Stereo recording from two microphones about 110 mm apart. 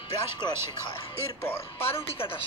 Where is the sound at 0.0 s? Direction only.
40° left (ahead or behind).